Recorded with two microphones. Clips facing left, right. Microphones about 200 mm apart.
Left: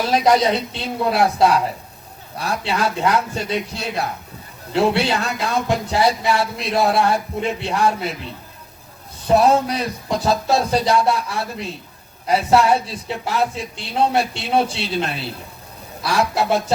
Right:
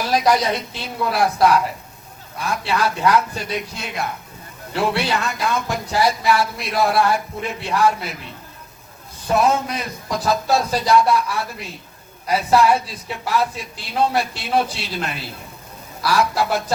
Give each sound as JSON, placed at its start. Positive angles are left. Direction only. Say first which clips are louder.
{"t": 0.1, "sound": "a man's voice", "louder": "left 2 dB", "side_deg": 30}
{"t": 9.2, "sound": "a woman's voice", "louder": "left 3 dB", "side_deg": 35}